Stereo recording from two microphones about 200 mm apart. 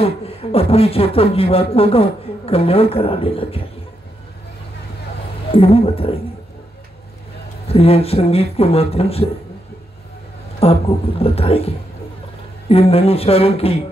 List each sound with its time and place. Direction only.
0.0 s a man's voice: 30° left (ahead or behind)
5.5 s a man's voice: 30° left (ahead or behind)
7.6 s a man's voice: 30° left (ahead or behind)
10.6 s a man's voice: 30° left (ahead or behind)